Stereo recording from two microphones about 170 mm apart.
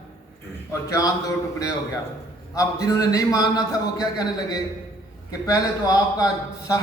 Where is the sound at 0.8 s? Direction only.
20° left (ahead or behind).